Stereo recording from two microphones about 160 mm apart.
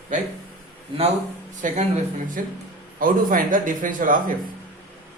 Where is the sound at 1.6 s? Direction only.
55° right (ahead or behind).